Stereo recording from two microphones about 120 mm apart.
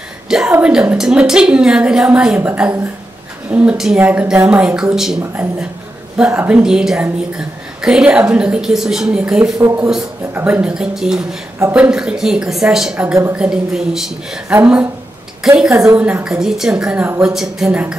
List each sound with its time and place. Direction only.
0.3 s a woman's voice: 10° right (ahead or behind)
6.6 s a woman's voice: 5° right (ahead or behind)
9.6 s a woman's voice: 20° right (ahead or behind); by 13.1 s 5° right (ahead or behind)
13.1 s speech: 20° right (ahead or behind)
13.4 s a woman's voice: 5° right (ahead or behind)
15.4 s a woman's voice: 5° right (ahead or behind)